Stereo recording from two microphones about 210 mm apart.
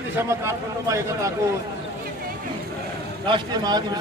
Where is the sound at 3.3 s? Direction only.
20° right (ahead or behind).